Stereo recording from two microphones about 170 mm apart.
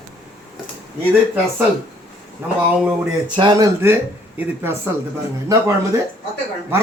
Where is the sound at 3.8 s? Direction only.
15° right (ahead or behind).